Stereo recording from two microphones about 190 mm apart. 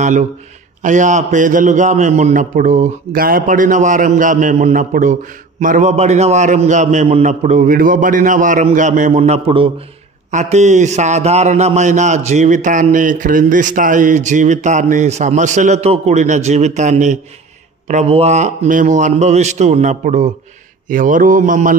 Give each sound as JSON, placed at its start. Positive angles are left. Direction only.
{"t": 0.8, "sound": "a man's voice", "side_deg": -40}